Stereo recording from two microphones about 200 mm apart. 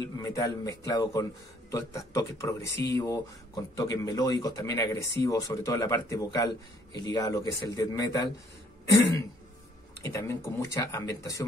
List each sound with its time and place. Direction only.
0.0 s speech: 15° left (ahead or behind)
10.0 s speech: 15° left (ahead or behind)